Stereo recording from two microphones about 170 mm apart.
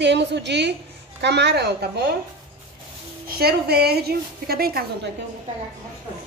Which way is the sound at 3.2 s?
65° right (ahead or behind).